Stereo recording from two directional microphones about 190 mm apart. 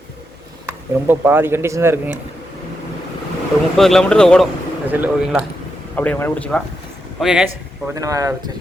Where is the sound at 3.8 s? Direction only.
Centre (ahead or behind).